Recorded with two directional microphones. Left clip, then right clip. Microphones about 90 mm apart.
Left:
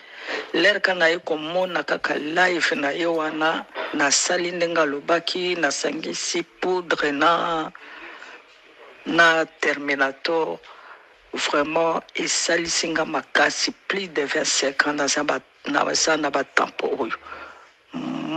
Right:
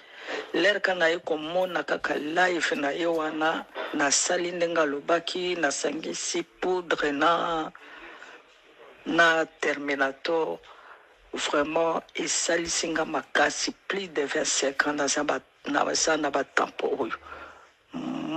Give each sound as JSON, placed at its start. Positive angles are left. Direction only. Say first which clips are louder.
{"t": 0.1, "sound": "speech", "louder": "left 4 dB", "side_deg": 30}
{"t": 17.9, "sound": "dog", "louder": "left 4 dB", "side_deg": 30}